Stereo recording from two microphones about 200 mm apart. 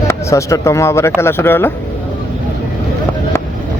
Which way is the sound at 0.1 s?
15° left (ahead or behind).